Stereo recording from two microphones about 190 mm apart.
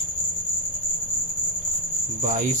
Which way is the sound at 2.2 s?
40° right (ahead or behind).